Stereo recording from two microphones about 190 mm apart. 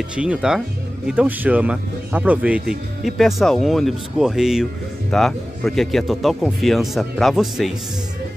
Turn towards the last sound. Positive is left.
turn(degrees=0)  # may be behind; listen again after turning